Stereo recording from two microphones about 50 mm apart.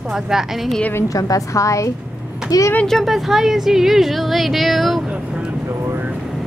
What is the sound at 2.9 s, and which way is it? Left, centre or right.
Speech, centre.